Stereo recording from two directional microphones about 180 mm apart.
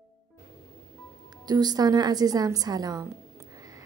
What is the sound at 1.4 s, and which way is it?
A woman's voice, 20° right (ahead or behind).